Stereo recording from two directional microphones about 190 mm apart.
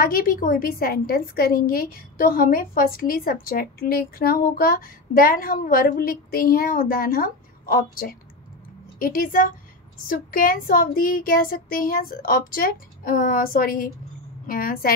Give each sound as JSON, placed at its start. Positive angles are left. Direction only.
{"t": 0.0, "sound": "a woman's voice", "side_deg": 50}